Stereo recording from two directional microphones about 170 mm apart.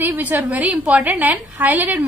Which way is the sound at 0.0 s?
10° right (ahead or behind).